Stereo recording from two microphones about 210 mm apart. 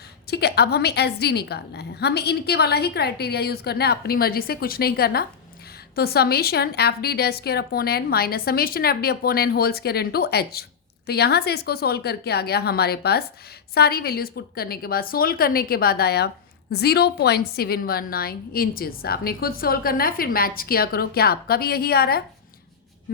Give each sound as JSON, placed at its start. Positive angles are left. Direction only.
{"t": 0.3, "sound": "a woman's voice", "side_deg": 50}